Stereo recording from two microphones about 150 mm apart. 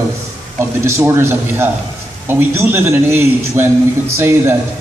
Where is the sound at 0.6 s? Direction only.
20° right (ahead or behind).